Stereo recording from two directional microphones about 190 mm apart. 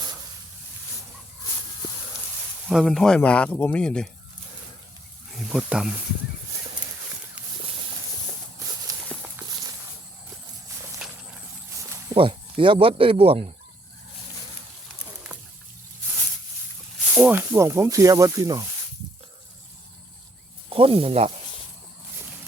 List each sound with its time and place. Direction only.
2.6 s speech: centre (ahead or behind)
5.4 s speech: centre (ahead or behind)
8.9 s walk: 20° right (ahead or behind)
11.0 s walk: centre (ahead or behind)
12.0 s speech: 25° right (ahead or behind)
17.2 s speech: 10° right (ahead or behind)
20.7 s speech: 30° right (ahead or behind)